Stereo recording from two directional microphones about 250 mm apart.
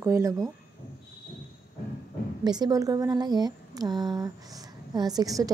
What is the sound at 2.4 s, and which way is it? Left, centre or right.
Speech, centre.